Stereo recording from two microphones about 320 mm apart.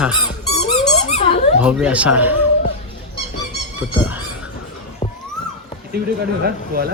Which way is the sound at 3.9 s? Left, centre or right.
Centre.